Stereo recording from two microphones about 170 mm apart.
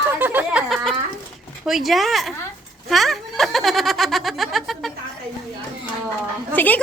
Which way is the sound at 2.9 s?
Centre (ahead or behind).